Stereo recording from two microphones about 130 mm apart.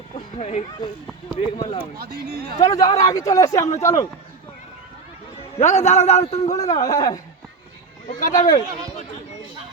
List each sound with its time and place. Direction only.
0.3 s speech: 55° left (ahead or behind)
0.8 s speech: 35° left (ahead or behind); by 2.7 s 50° left (ahead or behind)
3.0 s speech: 25° left (ahead or behind)
5.5 s a man's voice: 60° left (ahead or behind)
6.4 s speech: 25° left (ahead or behind)
8.0 s speech: 90° left